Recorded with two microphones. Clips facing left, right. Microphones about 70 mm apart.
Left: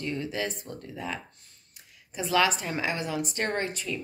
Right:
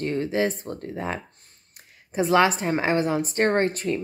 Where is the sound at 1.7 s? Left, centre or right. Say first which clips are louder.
Right 11 dB; right.